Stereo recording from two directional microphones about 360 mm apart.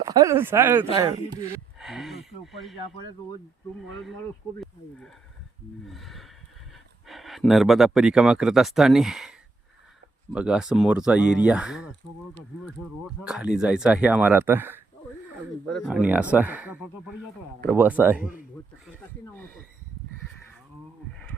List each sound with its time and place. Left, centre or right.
0.1 s speech: centre
4.6 s speech: centre
10.3 s speech: centre
18.2 s speech: left
18.9 s speech: centre